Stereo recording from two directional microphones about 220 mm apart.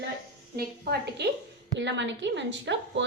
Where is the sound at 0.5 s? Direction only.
45° right (ahead or behind).